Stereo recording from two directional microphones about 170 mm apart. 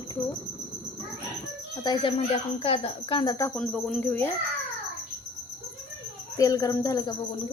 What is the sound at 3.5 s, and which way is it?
Speech, 5° left (ahead or behind).